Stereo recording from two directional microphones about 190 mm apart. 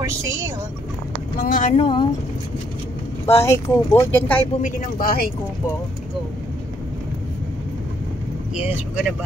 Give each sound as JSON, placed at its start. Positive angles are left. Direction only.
{"t": 0.0, "sound": "speech", "side_deg": -15}
{"t": 1.4, "sound": "speech", "side_deg": 45}
{"t": 3.4, "sound": "speech", "side_deg": 15}
{"t": 4.6, "sound": "speech", "side_deg": 45}
{"t": 8.6, "sound": "speech", "side_deg": -5}